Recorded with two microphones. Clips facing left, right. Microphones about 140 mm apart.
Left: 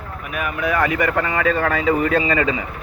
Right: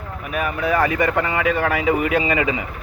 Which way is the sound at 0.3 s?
35° right (ahead or behind).